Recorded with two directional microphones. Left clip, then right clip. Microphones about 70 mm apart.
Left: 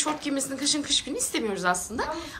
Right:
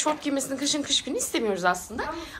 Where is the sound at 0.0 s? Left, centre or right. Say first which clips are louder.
Right 2 dB; centre.